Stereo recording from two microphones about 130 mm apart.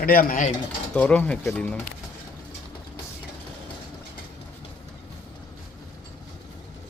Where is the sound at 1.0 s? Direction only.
10° left (ahead or behind).